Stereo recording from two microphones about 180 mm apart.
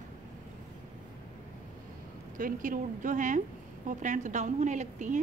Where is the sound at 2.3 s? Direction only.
50° right (ahead or behind).